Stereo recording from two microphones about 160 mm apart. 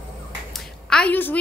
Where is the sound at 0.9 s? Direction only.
10° left (ahead or behind).